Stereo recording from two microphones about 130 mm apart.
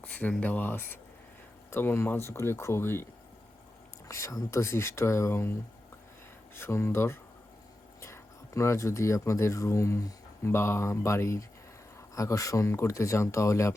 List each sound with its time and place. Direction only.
0.0 s speech: 10° left (ahead or behind)
4.1 s speech: 25° left (ahead or behind)
6.6 s speech: 20° left (ahead or behind)